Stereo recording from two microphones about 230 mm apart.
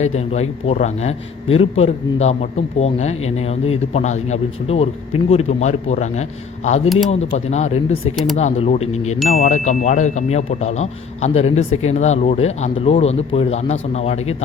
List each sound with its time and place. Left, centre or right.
0.0 s speech: left
6.8 s speech: centre
7.3 s speech: left